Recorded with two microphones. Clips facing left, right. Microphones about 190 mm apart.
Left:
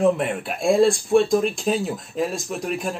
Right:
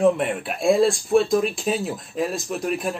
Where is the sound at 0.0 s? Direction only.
Centre (ahead or behind).